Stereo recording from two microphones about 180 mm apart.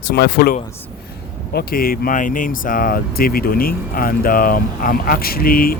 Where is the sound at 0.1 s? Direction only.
60° left (ahead or behind).